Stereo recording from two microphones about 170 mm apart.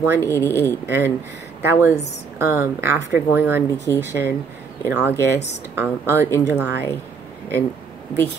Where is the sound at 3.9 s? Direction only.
15° left (ahead or behind).